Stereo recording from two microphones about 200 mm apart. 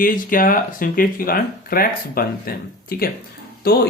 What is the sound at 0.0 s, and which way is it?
Speech, 45° left (ahead or behind).